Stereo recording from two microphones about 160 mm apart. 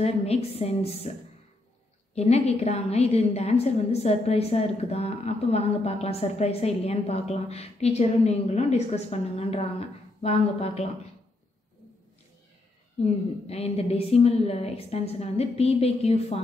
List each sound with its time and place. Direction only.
0.0 s a woman's voice: 40° left (ahead or behind)
2.1 s a woman's voice: 40° left (ahead or behind)
13.0 s a woman's voice: 40° left (ahead or behind)